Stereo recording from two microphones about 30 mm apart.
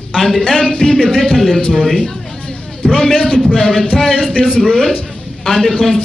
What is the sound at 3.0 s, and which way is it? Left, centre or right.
A man's voice, centre.